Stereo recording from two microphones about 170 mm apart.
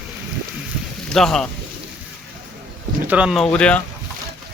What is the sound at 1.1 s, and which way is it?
Speech, centre (ahead or behind).